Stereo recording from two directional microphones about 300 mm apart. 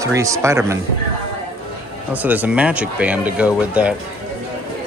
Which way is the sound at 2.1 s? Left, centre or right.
Centre.